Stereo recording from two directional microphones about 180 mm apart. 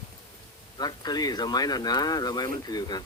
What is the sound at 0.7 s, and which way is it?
Speech, 20° left (ahead or behind).